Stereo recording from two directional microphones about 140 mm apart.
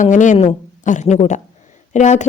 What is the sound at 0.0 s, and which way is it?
A woman's voice, 65° left (ahead or behind).